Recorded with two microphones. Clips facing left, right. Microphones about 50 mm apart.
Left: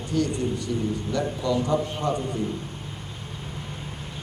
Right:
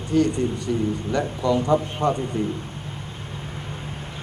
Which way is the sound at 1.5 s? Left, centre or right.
Right.